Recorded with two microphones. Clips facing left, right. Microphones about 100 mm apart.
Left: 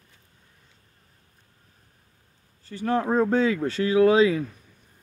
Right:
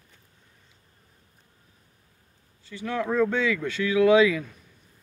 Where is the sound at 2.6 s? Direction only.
40° left (ahead or behind).